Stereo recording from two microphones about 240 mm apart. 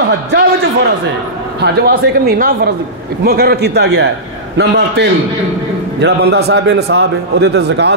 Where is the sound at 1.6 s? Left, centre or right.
Right.